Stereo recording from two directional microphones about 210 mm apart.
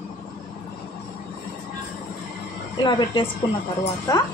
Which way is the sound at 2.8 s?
20° left (ahead or behind).